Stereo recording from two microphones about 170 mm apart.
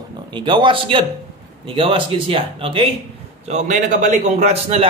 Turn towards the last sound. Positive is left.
turn(degrees=-40)  # may be behind; listen again after turning